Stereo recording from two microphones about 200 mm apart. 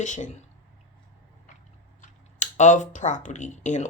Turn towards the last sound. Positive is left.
turn(degrees=35)  # may be behind; listen again after turning